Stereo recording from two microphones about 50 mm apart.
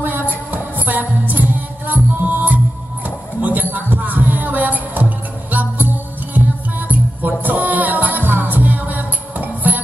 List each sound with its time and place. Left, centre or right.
0.0 s a sound: right
0.5 s music: right
6.9 s music: right